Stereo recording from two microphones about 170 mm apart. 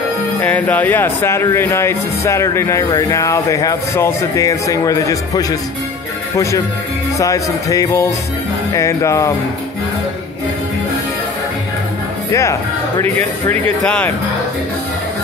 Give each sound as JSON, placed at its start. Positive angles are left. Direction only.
{"t": 0.4, "sound": "speech", "side_deg": 10}
{"t": 12.3, "sound": "speech", "side_deg": 20}